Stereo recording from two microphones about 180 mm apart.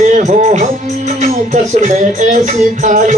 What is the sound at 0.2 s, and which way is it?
Music, 40° right (ahead or behind).